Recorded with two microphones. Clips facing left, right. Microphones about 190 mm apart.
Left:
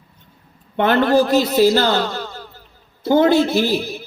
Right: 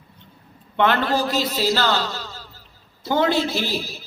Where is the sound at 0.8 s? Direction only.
50° left (ahead or behind).